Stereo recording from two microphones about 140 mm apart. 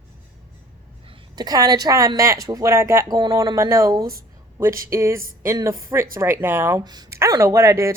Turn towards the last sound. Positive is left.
turn(degrees=-20)  # may be behind; listen again after turning